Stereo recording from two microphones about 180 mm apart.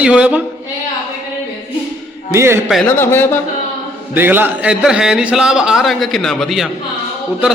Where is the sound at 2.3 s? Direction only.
15° right (ahead or behind).